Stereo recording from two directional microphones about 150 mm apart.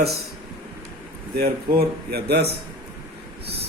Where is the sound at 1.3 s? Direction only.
90° right.